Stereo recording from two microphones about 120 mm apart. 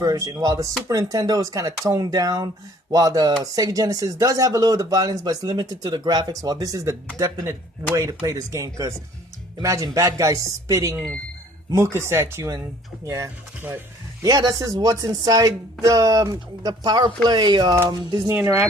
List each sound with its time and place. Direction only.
0.0 s speech: 30° right (ahead or behind)
18.3 s speech: 15° right (ahead or behind)